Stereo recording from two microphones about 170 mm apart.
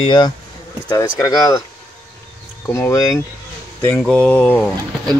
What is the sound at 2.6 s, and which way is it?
Speech, 15° left (ahead or behind).